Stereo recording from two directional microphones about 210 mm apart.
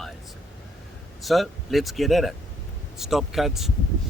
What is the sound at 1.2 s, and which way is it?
Speech, centre (ahead or behind).